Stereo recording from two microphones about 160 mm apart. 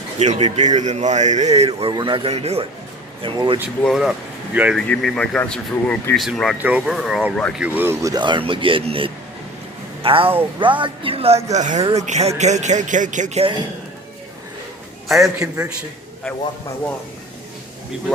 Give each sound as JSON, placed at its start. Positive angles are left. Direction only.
{"t": 0.2, "sound": "a man's voice", "side_deg": -45}
{"t": 1.9, "sound": "speech", "side_deg": -30}
{"t": 3.8, "sound": "speech", "side_deg": 0}
{"t": 4.9, "sound": "speech", "side_deg": 5}
{"t": 6.1, "sound": "a man's voice", "side_deg": 0}
{"t": 15.0, "sound": "a man's voice", "side_deg": 0}